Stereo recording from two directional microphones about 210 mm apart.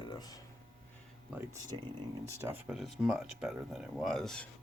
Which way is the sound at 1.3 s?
15° right (ahead or behind).